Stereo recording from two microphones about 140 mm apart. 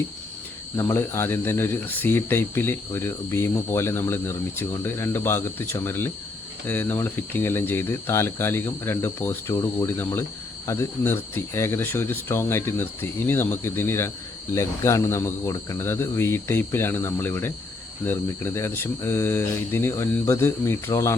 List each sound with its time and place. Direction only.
0.8 s speech: 20° left (ahead or behind)